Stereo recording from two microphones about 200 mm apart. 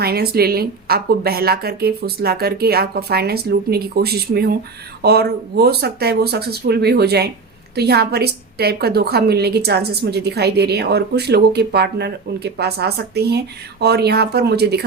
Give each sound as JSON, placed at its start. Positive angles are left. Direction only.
{"t": 0.0, "sound": "a woman's voice", "side_deg": -50}